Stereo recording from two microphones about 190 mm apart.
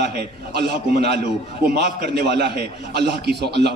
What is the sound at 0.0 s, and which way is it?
A man's voice, 55° right (ahead or behind).